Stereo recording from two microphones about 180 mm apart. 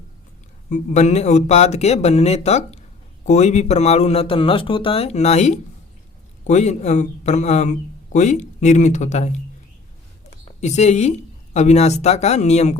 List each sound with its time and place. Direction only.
0.7 s speech: 40° left (ahead or behind)